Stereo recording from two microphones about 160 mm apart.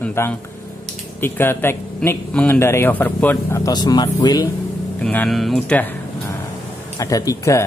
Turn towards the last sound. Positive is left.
turn(degrees=20)  # may be behind; listen again after turning